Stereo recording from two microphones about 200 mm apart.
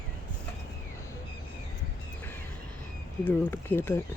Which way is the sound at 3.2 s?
10° left (ahead or behind).